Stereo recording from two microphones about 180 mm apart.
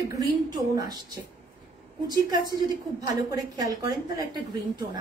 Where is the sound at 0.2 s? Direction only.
20° right (ahead or behind).